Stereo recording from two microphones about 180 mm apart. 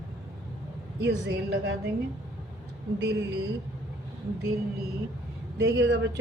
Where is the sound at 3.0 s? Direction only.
75° right (ahead or behind).